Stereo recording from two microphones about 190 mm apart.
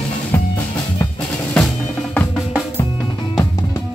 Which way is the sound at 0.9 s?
10° left (ahead or behind).